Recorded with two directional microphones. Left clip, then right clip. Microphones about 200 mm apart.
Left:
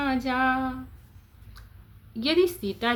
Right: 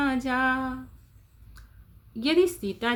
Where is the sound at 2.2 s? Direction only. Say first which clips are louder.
Even; 15° right (ahead or behind).